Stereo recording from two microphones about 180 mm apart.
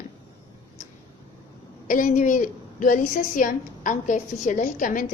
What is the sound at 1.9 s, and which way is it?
A woman's voice, 45° left (ahead or behind).